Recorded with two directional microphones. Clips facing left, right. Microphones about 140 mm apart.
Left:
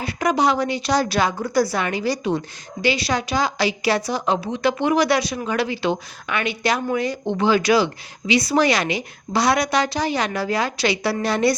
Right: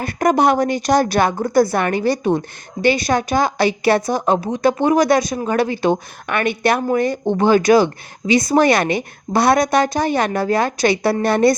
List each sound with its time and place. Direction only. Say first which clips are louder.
0.0 s a woman's voice: right 4 dB; 50° right (ahead or behind)